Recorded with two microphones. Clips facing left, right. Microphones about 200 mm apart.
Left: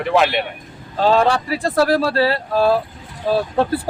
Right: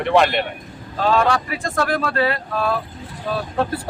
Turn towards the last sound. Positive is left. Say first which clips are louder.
# left 5 dB
turn(degrees=30)  # may be behind; listen again after turning